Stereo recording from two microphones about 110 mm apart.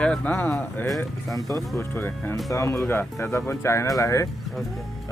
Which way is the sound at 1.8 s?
20° left (ahead or behind).